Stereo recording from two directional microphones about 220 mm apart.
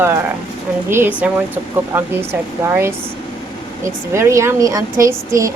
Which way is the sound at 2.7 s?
10° right (ahead or behind).